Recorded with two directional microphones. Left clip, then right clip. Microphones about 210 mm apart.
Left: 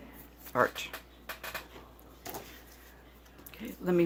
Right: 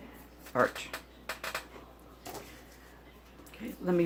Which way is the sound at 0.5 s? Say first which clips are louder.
Even; 35° left (ahead or behind).